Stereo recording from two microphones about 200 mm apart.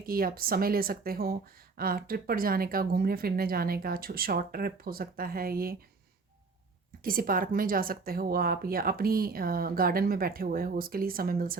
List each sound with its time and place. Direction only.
0.0 s speech: 45° right (ahead or behind)
7.0 s speech: 45° right (ahead or behind)